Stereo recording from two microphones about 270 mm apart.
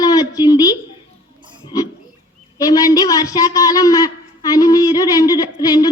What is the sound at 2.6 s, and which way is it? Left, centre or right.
A woman's voice, centre.